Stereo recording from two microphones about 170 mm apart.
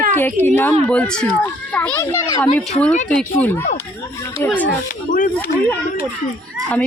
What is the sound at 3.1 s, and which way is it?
A woman's voice, 5° left (ahead or behind).